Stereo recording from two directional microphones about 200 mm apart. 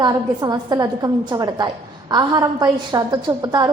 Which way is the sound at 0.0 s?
20° right (ahead or behind).